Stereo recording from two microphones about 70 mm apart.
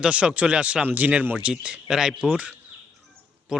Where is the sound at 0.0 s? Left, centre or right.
Centre.